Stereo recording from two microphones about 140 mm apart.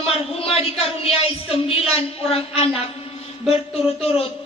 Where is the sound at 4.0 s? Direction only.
45° left (ahead or behind).